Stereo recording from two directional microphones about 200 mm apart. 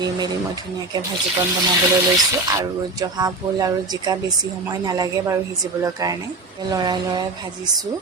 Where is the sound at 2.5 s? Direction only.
20° right (ahead or behind).